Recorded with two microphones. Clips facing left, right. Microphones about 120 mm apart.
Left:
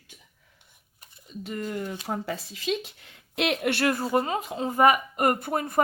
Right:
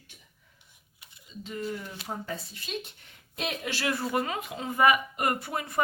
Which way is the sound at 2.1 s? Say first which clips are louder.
Left 1 dB; 90° left.